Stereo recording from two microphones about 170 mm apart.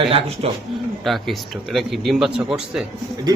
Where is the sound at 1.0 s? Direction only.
Centre (ahead or behind).